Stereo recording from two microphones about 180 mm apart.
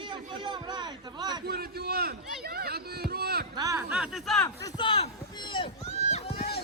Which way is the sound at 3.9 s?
5° right (ahead or behind).